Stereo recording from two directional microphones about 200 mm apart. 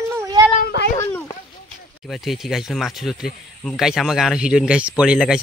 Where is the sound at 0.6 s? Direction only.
50° left (ahead or behind).